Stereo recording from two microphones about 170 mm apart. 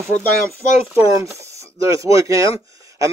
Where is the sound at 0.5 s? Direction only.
15° right (ahead or behind).